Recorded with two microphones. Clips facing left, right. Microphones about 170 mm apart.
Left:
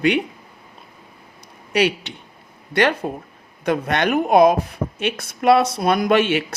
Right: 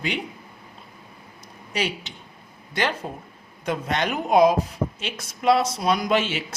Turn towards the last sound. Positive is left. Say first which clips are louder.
# left 6 dB
turn(degrees=65)  # may be behind; listen again after turning